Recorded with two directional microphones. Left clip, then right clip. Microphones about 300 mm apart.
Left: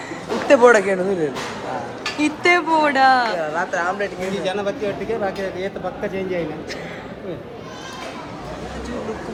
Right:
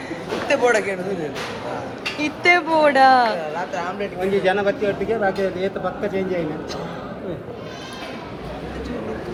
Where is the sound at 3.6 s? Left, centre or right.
Left.